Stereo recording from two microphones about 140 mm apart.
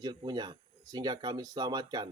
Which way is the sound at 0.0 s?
30° right (ahead or behind).